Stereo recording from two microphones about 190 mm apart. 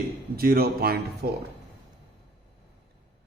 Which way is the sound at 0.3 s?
50° right (ahead or behind).